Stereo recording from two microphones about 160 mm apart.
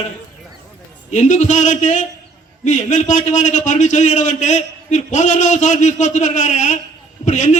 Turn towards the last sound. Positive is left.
turn(degrees=50)  # may be behind; listen again after turning